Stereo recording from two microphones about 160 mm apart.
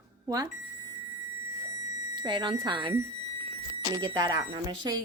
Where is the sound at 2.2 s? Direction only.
30° right (ahead or behind).